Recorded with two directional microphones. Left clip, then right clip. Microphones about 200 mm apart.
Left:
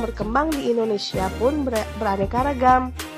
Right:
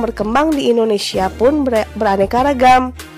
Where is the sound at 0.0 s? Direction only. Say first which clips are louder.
Right 7 dB; 40° right (ahead or behind).